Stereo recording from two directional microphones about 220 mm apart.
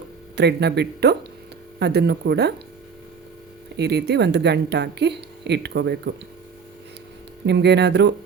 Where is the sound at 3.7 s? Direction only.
50° right (ahead or behind).